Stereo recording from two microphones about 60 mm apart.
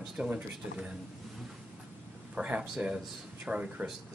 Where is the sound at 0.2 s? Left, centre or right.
Centre.